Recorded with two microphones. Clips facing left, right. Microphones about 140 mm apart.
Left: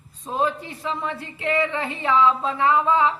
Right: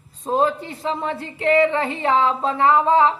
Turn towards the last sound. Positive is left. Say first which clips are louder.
# right 3 dB
turn(degrees=-35)  # may be behind; listen again after turning